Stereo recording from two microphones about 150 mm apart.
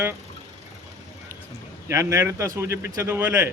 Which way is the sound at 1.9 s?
20° right (ahead or behind).